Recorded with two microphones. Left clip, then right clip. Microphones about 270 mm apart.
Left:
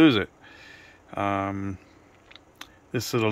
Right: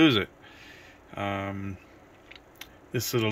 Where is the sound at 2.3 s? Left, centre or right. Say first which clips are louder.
Left 1 dB; centre.